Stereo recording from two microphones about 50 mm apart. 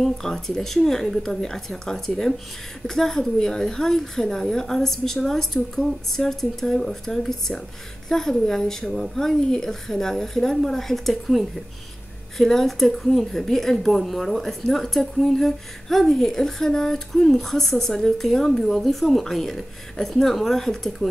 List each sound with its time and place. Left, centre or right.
0.0 s a woman's voice: centre